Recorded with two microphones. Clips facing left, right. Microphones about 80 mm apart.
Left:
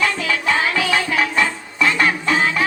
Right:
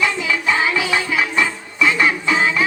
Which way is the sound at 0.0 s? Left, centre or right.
Centre.